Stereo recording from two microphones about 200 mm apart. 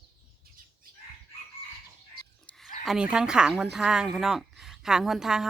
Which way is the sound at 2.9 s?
5° right (ahead or behind).